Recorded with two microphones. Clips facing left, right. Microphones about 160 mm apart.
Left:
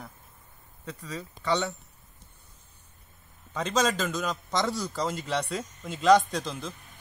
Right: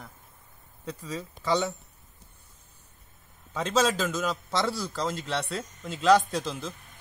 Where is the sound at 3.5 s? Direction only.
5° right (ahead or behind).